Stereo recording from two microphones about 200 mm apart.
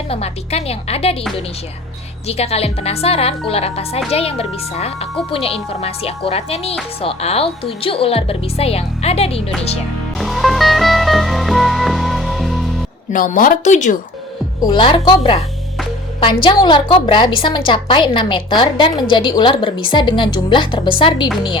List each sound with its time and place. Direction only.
0.1 s a woman's voice: 30° left (ahead or behind)
2.2 s a woman's voice: 30° left (ahead or behind)
10.2 s music: centre (ahead or behind)
13.1 s a woman's voice: 40° left (ahead or behind)
14.6 s a woman's voice: 25° left (ahead or behind)